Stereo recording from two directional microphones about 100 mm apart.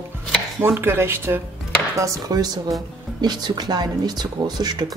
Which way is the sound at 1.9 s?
35° right (ahead or behind).